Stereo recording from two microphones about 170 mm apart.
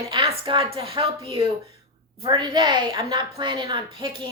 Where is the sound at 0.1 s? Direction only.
30° right (ahead or behind).